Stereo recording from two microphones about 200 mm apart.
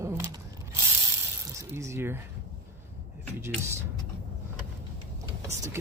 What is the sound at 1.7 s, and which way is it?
Speech, 15° right (ahead or behind).